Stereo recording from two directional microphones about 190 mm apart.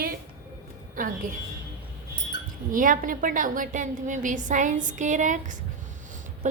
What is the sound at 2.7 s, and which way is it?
A woman's voice, 45° right (ahead or behind).